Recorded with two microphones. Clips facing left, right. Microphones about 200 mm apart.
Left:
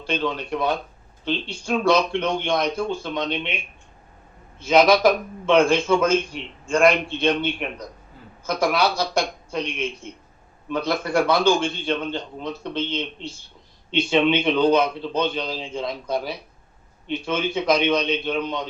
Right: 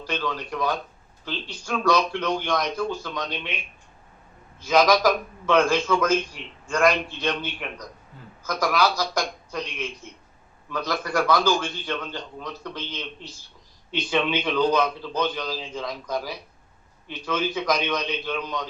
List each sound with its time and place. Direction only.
0.0 s a man's voice: 25° left (ahead or behind)
4.6 s a man's voice: 25° left (ahead or behind)